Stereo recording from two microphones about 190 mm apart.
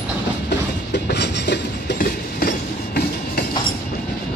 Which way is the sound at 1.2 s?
65° left (ahead or behind).